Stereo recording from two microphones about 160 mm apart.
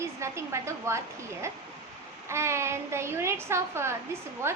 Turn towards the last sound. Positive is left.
turn(degrees=-15)  # may be behind; listen again after turning